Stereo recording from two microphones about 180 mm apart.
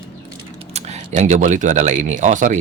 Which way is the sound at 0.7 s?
40° right (ahead or behind).